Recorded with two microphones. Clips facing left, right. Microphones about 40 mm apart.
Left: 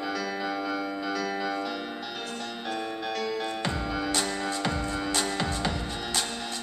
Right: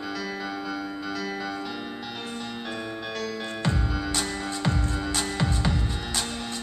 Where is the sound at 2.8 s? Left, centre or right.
Centre.